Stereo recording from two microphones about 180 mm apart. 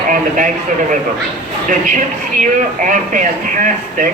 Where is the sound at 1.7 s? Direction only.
45° right (ahead or behind).